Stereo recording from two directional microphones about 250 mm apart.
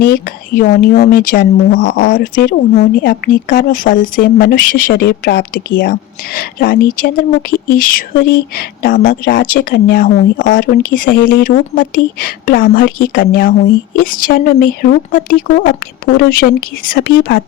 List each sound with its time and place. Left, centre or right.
0.1 s speech: left